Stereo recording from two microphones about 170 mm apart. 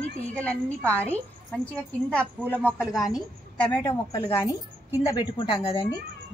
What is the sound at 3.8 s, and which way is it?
A man's voice, 25° left (ahead or behind).